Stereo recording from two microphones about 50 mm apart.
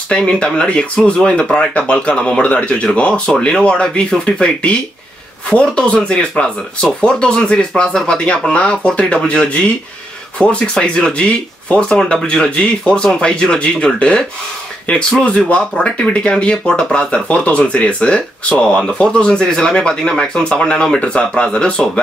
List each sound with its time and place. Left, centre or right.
0.1 s speech: centre
10.6 s speech: centre
11.2 s speech: left